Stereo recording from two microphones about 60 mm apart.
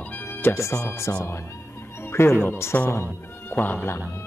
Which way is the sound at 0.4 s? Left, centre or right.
Left.